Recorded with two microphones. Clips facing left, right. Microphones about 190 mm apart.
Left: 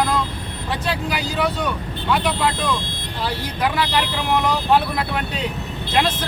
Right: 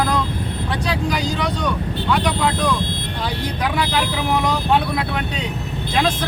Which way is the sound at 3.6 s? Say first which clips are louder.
Left 1 dB; centre (ahead or behind).